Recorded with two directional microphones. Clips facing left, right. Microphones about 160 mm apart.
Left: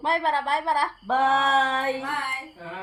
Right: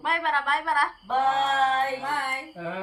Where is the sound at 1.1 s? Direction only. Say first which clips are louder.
Left 3 dB; 90° left.